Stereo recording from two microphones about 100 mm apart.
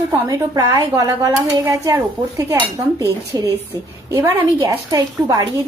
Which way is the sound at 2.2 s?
55° right (ahead or behind).